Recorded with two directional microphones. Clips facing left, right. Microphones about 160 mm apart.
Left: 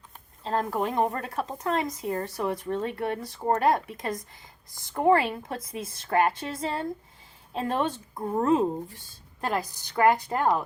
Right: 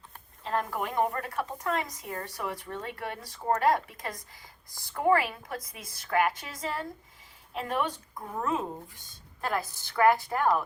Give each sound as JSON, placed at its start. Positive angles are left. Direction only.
{"t": 0.4, "sound": "speech", "side_deg": 30}
{"t": 9.4, "sound": "speech", "side_deg": 20}